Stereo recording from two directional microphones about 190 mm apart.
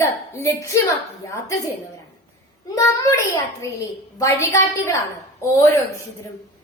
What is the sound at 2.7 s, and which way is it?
Speech, 15° left (ahead or behind).